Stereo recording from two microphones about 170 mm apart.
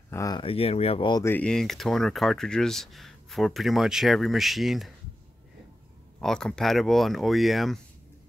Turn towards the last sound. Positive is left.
turn(degrees=0)  # may be behind; listen again after turning